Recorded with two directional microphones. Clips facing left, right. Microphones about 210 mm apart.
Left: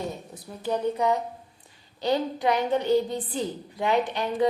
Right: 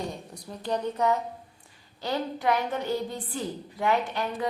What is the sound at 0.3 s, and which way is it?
A woman's voice, 5° left (ahead or behind).